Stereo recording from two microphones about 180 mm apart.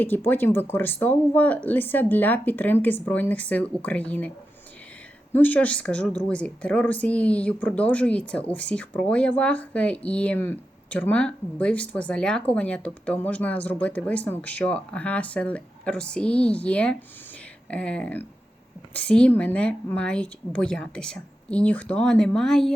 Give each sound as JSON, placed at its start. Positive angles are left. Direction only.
{"t": 0.0, "sound": "a woman's voice", "side_deg": 10}
{"t": 5.3, "sound": "a woman's voice", "side_deg": 10}